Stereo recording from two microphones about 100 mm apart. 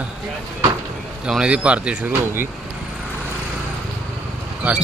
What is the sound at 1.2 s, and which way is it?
Speech, 10° right (ahead or behind).